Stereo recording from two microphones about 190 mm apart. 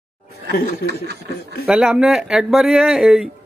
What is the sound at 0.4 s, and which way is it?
Snicker, 60° right (ahead or behind).